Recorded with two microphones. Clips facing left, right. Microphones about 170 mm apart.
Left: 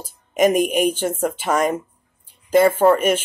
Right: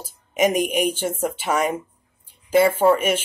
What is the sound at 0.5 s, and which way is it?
Speech, 50° left (ahead or behind).